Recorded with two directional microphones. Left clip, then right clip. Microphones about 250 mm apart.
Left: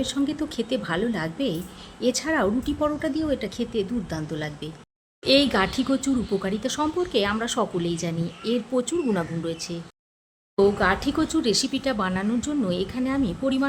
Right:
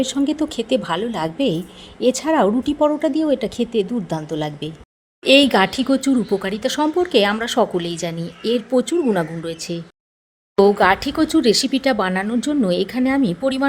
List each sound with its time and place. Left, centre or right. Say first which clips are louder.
0.0 s a woman's voice: right 6 dB; centre